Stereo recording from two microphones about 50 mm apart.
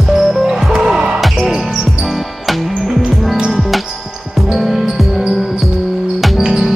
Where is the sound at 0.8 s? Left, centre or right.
Centre.